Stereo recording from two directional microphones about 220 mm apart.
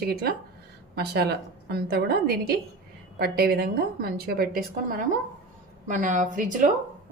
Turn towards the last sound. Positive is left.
turn(degrees=-35)  # may be behind; listen again after turning